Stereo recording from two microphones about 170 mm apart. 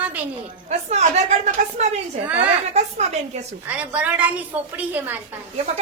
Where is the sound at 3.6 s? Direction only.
10° right (ahead or behind).